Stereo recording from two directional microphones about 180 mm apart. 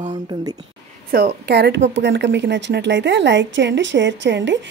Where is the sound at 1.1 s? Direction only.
55° right (ahead or behind).